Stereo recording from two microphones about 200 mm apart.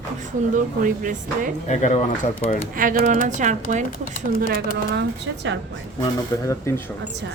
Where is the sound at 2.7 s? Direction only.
45° right (ahead or behind).